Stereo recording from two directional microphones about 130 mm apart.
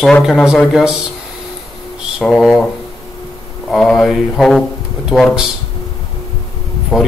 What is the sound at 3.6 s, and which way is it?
Speech, centre (ahead or behind).